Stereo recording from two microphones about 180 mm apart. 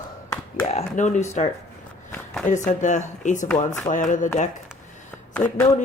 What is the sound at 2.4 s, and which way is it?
A woman's voice, 45° left (ahead or behind).